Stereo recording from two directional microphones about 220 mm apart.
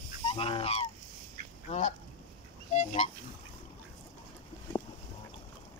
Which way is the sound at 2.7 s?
30° left (ahead or behind).